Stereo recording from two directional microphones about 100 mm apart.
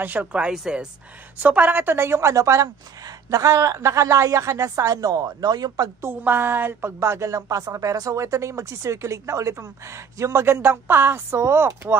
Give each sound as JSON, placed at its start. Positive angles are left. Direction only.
{"t": 0.0, "sound": "a woman's voice", "side_deg": -15}
{"t": 6.0, "sound": "a woman's voice", "side_deg": -20}
{"t": 7.0, "sound": "speech", "side_deg": -30}